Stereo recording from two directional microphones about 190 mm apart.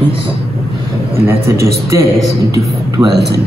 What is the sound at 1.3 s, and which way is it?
Speech, 15° right (ahead or behind).